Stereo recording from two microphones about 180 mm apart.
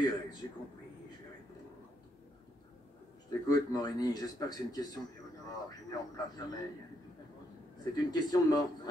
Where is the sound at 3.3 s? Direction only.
20° left (ahead or behind).